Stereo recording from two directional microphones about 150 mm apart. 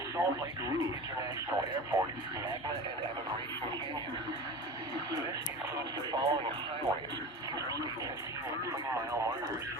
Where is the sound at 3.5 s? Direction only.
30° right (ahead or behind).